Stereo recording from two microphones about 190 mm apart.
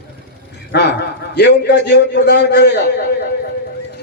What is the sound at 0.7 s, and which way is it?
A man's voice, 60° left (ahead or behind).